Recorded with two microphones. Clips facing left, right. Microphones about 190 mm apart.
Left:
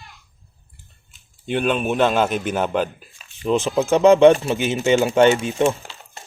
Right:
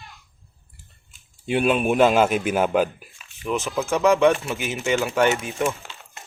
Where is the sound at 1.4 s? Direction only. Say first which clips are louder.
Right 1 dB; 10° right (ahead or behind).